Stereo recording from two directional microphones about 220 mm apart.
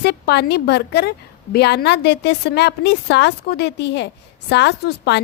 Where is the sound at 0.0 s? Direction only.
50° left (ahead or behind).